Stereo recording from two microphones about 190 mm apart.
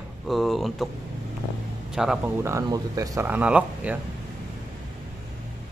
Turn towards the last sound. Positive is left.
turn(degrees=-5)  # may be behind; listen again after turning